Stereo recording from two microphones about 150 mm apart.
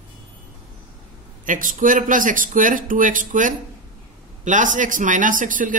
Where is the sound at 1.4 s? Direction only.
60° right (ahead or behind).